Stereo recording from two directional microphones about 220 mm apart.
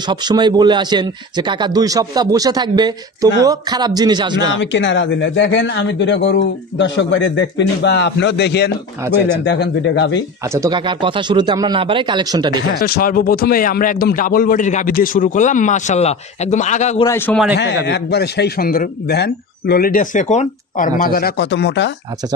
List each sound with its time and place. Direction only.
0.1 s speech: 20° right (ahead or behind)
4.6 s speech: 55° left (ahead or behind)
10.5 s speech: 15° right (ahead or behind)
12.8 s a man's voice: 45° left (ahead or behind)
17.0 s a man's voice: 10° left (ahead or behind)
17.8 s speech: 50° left (ahead or behind)